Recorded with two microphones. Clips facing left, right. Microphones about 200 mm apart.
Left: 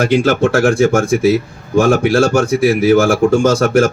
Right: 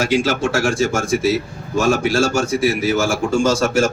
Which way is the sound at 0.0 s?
55° left (ahead or behind).